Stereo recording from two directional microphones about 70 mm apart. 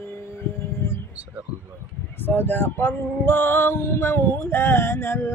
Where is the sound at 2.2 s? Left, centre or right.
Left.